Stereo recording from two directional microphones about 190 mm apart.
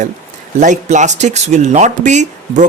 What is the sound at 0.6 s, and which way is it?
Speech, 40° right (ahead or behind).